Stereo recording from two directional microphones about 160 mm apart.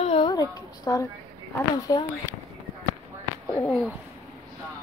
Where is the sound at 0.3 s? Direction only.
25° left (ahead or behind).